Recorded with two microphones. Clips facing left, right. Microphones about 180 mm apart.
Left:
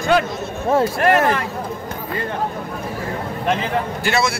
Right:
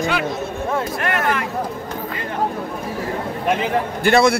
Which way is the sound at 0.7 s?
35° left (ahead or behind).